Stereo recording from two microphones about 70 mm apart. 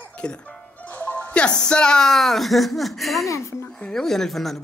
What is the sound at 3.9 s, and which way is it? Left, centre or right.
Speech, centre.